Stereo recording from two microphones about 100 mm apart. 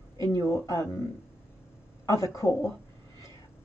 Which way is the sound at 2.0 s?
30° left (ahead or behind).